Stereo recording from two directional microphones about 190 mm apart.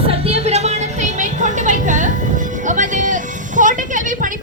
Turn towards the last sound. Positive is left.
turn(degrees=-45)  # may be behind; listen again after turning